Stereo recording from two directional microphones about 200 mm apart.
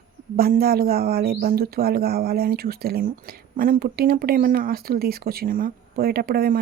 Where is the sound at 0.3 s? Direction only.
50° right (ahead or behind).